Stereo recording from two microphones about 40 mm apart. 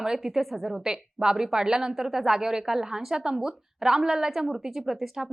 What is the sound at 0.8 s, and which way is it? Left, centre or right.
A woman's voice, centre.